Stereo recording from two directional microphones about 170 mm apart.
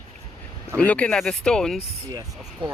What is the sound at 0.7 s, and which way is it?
Speech, 10° left (ahead or behind).